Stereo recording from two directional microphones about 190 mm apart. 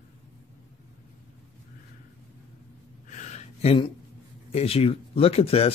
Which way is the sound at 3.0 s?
40° left (ahead or behind).